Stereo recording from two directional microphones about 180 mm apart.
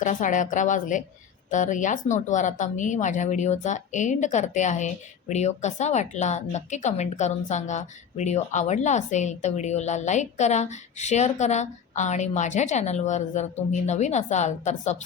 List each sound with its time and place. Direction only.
0.0 s speech: 45° left (ahead or behind)